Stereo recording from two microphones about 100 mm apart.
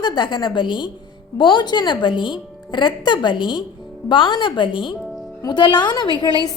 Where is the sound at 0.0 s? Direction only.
45° left (ahead or behind).